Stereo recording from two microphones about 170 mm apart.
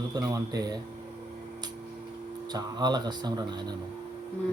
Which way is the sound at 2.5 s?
25° right (ahead or behind).